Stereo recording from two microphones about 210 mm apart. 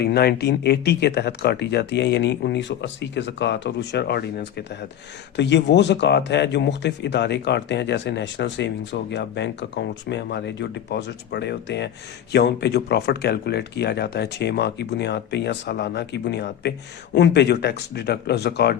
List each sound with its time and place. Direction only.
0.0 s speech: 50° left (ahead or behind)